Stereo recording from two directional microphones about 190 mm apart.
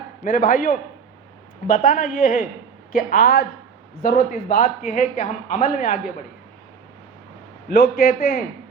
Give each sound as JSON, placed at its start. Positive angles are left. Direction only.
{"t": 0.3, "sound": "speech", "side_deg": 45}
{"t": 7.7, "sound": "speech", "side_deg": 50}